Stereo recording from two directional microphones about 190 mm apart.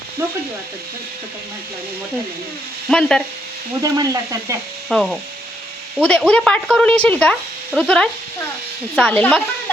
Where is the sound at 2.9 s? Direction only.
5° left (ahead or behind).